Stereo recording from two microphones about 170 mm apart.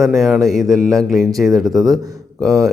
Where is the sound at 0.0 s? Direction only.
Centre (ahead or behind).